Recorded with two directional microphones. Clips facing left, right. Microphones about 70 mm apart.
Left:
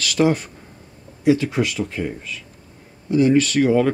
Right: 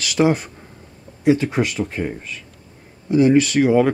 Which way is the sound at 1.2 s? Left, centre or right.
Right.